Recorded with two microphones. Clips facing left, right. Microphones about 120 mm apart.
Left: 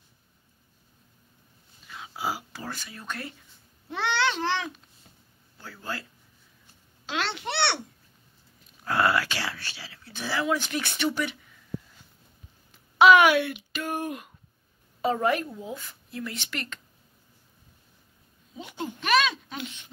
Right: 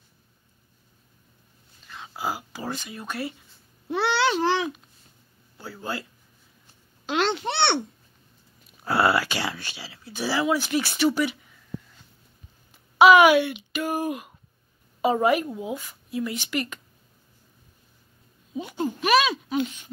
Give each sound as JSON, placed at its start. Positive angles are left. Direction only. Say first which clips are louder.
{"t": 1.9, "sound": "a sound", "louder": "right 1 dB", "side_deg": 5}
{"t": 2.6, "sound": "speech", "louder": "right 5 dB", "side_deg": -20}
{"t": 3.9, "sound": "babbling", "louder": "right 4 dB", "side_deg": -10}
{"t": 5.8, "sound": "speech", "louder": "right 4 dB", "side_deg": -15}
{"t": 7.1, "sound": "a child's voice", "louder": "right 6 dB", "side_deg": -20}
{"t": 8.8, "sound": "speech", "louder": "right 3 dB", "side_deg": -10}
{"t": 12.9, "sound": "a woman's voice", "louder": "right 3 dB", "side_deg": -5}
{"t": 18.6, "sound": "speech", "louder": "right 7 dB", "side_deg": -40}
{"t": 18.9, "sound": "speech", "louder": "right 3 dB", "side_deg": -10}